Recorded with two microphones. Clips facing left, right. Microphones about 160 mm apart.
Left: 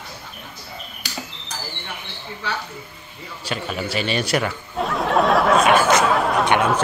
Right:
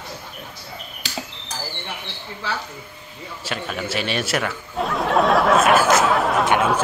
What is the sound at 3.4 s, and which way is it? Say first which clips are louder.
Speech: left 1 dB; centre (ahead or behind).